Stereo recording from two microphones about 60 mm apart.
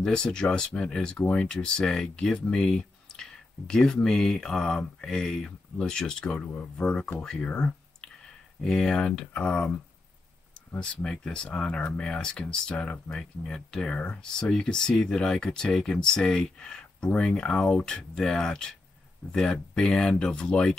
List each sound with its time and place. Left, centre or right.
0.0 s speech: centre
10.8 s speech: centre